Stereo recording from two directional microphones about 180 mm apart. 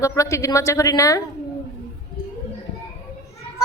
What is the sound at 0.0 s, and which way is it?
A child's voice, 15° left (ahead or behind).